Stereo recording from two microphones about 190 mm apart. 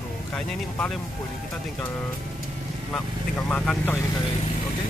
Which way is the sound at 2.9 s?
5° left (ahead or behind).